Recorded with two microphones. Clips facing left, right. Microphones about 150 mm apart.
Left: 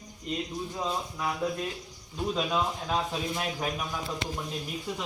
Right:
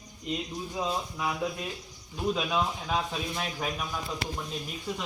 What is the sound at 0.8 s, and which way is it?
Speech, 10° right (ahead or behind).